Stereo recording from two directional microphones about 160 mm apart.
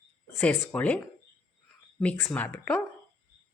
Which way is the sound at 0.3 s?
10° left (ahead or behind).